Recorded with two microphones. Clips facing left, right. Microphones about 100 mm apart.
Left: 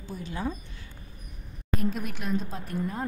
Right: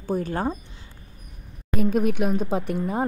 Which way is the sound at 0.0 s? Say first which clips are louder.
Right 8 dB; 50° right (ahead or behind).